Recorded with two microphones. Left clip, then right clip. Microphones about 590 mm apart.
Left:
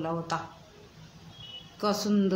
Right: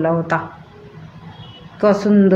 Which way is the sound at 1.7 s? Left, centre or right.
Left.